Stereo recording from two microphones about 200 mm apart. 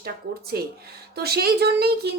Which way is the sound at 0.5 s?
50° right (ahead or behind).